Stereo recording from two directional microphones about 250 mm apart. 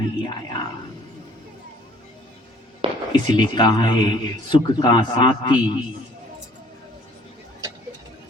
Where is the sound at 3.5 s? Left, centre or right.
Centre.